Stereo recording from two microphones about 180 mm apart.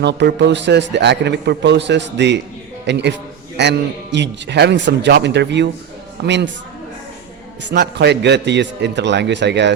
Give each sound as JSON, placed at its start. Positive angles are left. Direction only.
{"t": 0.0, "sound": "a man's voice", "side_deg": -75}
{"t": 7.7, "sound": "a man's voice", "side_deg": -70}